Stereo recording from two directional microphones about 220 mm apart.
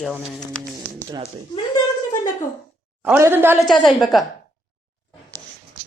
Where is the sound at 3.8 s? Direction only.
Centre (ahead or behind).